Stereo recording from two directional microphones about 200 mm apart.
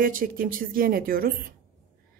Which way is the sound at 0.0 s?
45° right (ahead or behind).